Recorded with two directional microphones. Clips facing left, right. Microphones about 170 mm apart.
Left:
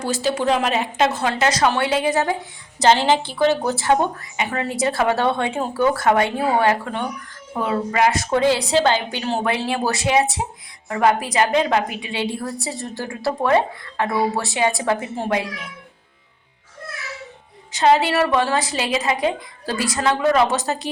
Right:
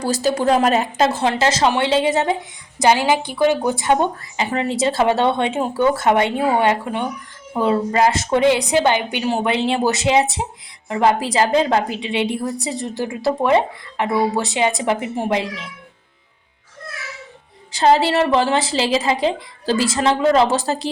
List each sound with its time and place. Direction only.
0.0 s a woman's voice: 40° right (ahead or behind); by 2.3 s 25° right (ahead or behind)
2.7 s a woman's voice: 10° right (ahead or behind)
7.6 s a woman's voice: 30° right (ahead or behind)
17.7 s a woman's voice: 35° right (ahead or behind)